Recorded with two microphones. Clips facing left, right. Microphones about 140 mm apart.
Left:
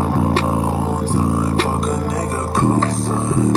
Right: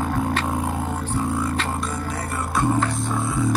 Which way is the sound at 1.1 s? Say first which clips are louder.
Left 5 dB; 40° left (ahead or behind).